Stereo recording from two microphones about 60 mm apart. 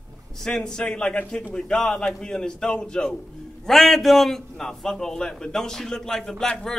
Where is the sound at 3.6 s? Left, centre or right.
Centre.